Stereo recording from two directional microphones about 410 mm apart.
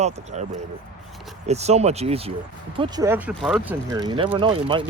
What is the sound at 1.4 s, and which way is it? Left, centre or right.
Speech, centre.